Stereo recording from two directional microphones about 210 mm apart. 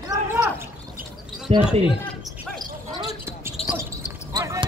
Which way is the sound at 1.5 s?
30° right (ahead or behind).